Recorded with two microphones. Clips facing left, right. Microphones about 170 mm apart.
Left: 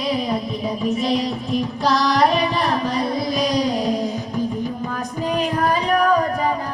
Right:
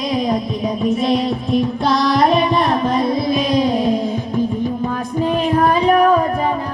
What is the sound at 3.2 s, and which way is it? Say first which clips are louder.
Music: right 3 dB; 40° left (ahead or behind).